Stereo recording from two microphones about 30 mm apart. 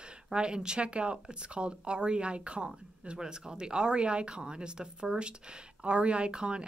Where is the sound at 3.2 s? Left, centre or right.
Right.